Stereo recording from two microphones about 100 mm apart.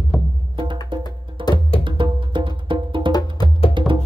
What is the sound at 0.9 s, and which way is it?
Music, 55° right (ahead or behind).